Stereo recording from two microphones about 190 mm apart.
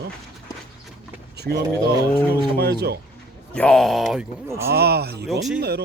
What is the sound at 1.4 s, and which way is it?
Speech, 60° right (ahead or behind).